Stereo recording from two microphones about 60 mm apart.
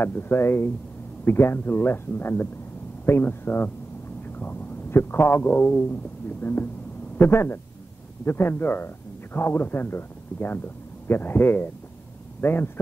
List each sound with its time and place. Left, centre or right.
0.0 s speech: left
4.4 s a sound: left
4.9 s a man's voice: left